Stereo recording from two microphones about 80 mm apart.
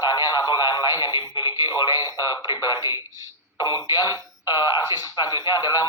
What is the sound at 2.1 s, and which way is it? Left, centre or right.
Speech, left.